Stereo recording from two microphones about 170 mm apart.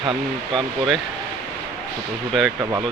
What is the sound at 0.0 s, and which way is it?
Speech, 30° right (ahead or behind).